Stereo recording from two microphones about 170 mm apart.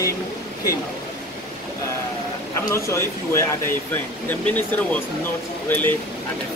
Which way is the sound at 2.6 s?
15° left (ahead or behind).